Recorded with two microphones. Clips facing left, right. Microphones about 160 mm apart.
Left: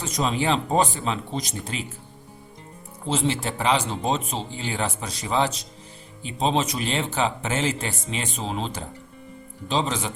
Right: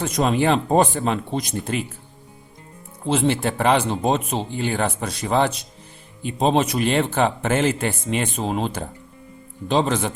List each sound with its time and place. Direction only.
0.0 s speech: 55° right (ahead or behind)
3.1 s speech: 55° right (ahead or behind)